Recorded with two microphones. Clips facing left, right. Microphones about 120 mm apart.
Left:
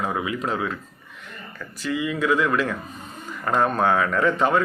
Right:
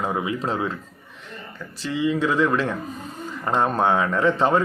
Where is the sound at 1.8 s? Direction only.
30° right (ahead or behind).